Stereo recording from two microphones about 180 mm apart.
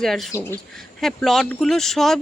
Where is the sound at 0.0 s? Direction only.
Centre (ahead or behind).